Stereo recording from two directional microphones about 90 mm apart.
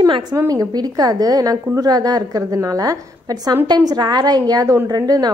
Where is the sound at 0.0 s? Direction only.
50° right (ahead or behind).